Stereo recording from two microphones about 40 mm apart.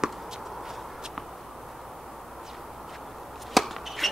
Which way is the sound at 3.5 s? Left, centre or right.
Centre.